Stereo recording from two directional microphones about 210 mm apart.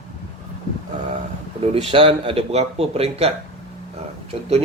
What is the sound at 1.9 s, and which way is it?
A man's voice, 25° right (ahead or behind).